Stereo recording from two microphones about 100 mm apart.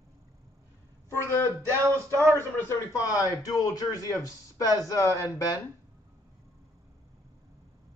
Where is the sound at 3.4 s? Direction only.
35° left (ahead or behind).